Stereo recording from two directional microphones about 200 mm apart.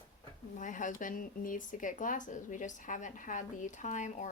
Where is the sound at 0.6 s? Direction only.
40° left (ahead or behind).